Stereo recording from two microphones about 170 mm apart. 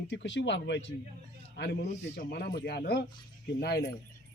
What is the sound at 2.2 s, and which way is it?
Speech, 70° left (ahead or behind).